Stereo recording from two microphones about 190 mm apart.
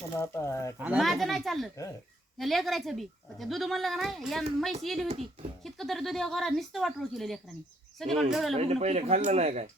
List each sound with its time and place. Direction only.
0.2 s speech: 15° left (ahead or behind)
0.8 s speech: 5° right (ahead or behind)
5.0 s speech: 35° right (ahead or behind)
5.6 s speech: centre (ahead or behind)
8.5 s speech: 35° right (ahead or behind)